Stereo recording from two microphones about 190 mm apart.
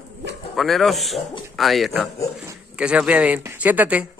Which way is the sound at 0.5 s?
Centre (ahead or behind).